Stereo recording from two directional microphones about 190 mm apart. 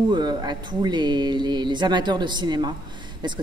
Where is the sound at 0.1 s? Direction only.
20° right (ahead or behind).